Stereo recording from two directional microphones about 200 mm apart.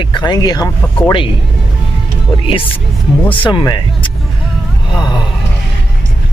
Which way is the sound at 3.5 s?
25° left (ahead or behind).